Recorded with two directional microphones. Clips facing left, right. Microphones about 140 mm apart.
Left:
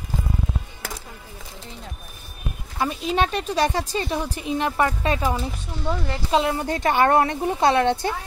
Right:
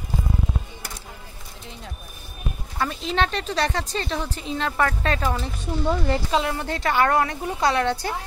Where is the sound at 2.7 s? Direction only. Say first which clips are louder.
Left 2 dB; 15° left (ahead or behind).